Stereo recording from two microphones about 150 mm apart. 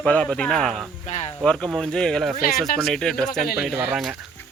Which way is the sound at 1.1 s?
50° left (ahead or behind).